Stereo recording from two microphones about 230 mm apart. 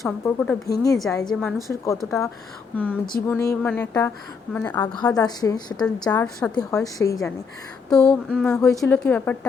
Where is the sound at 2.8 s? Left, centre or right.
Centre.